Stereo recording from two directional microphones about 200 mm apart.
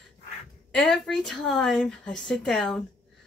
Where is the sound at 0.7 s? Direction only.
5° left (ahead or behind).